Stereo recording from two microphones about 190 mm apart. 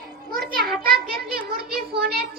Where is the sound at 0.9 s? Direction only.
55° right (ahead or behind).